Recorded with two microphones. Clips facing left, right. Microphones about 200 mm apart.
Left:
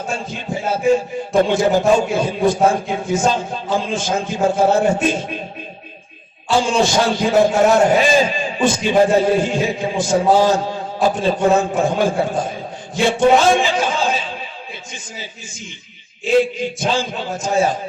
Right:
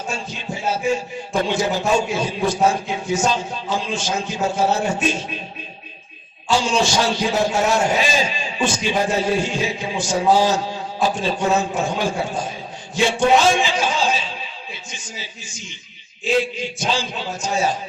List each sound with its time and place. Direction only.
0.1 s a man's voice: 55° left (ahead or behind)
6.6 s a man's voice: 55° left (ahead or behind)
13.1 s a sound: 55° left (ahead or behind)
16.4 s a man's voice: 55° left (ahead or behind)